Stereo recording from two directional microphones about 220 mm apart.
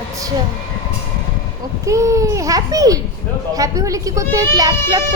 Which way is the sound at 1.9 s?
15° right (ahead or behind).